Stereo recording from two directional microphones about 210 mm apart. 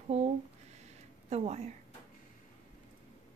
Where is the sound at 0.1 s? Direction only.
30° right (ahead or behind).